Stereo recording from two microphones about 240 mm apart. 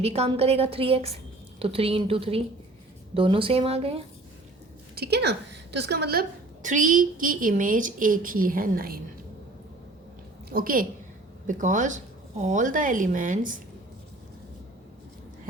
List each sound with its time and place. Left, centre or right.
0.0 s a woman's voice: right
4.9 s a woman's voice: right
10.5 s a woman's voice: right